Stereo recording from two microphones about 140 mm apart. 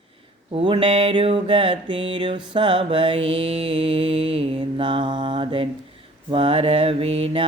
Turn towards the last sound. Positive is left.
turn(degrees=-40)  # may be behind; listen again after turning